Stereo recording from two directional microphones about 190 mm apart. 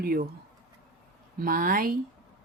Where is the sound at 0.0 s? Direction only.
50° right (ahead or behind).